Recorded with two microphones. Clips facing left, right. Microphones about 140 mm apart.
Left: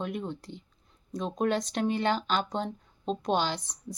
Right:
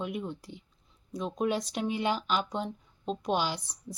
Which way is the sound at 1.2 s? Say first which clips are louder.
Left 1 dB; 35° left (ahead or behind).